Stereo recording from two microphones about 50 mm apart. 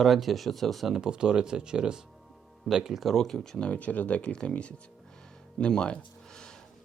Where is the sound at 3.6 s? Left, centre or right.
Left.